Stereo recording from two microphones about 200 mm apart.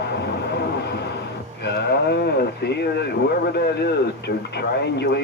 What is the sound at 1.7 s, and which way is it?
Speech, 55° left (ahead or behind).